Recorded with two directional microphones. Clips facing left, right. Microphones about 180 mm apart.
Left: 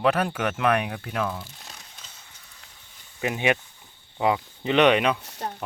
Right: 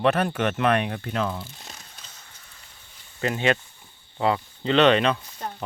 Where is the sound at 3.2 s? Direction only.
15° left (ahead or behind).